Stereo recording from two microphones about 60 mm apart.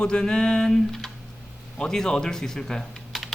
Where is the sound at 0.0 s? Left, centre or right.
Centre.